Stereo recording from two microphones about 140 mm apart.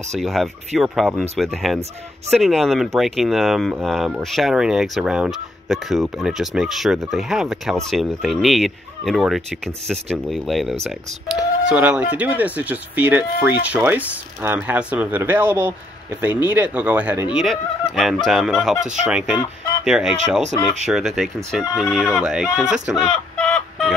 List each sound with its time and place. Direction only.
0.2 s speech: centre (ahead or behind)
23.3 s chicken: 10° left (ahead or behind)